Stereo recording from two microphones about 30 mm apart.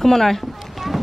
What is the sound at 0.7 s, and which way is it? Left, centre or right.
Boat, centre.